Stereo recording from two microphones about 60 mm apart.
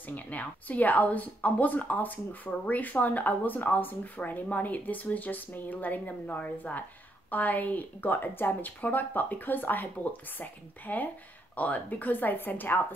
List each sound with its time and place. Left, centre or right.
0.1 s a woman's voice: left